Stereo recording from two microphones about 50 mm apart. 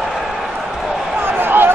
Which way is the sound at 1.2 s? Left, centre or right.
Right.